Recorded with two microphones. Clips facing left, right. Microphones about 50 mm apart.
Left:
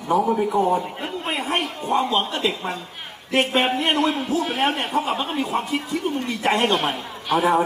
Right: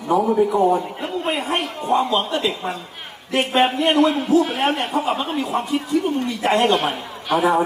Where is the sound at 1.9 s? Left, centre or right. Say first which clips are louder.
Right 2 dB; centre.